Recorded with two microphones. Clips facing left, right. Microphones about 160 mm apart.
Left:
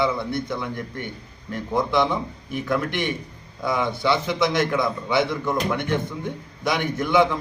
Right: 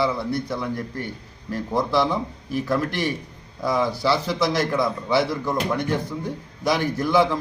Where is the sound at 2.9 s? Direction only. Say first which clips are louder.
Right 1 dB; 35° right (ahead or behind).